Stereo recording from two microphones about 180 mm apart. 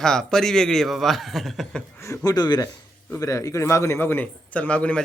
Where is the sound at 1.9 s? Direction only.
15° left (ahead or behind).